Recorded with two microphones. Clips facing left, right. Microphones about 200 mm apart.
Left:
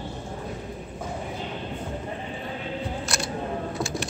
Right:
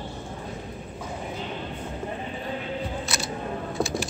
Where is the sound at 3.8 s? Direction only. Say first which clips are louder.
Right 2 dB; centre (ahead or behind).